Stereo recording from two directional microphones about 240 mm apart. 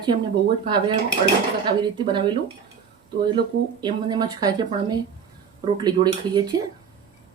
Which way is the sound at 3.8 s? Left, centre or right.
Centre.